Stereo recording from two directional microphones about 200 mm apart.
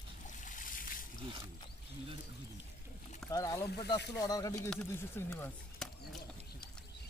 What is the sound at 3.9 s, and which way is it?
Speech, 55° left (ahead or behind).